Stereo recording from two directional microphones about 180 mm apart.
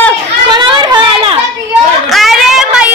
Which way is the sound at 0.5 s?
25° right (ahead or behind).